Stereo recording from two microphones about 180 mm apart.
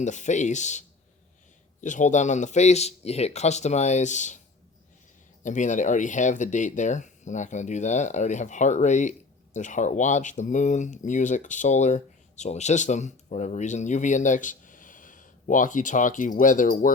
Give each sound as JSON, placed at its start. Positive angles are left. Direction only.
{"t": 0.0, "sound": "a man's voice", "side_deg": 40}
{"t": 5.4, "sound": "speech", "side_deg": 45}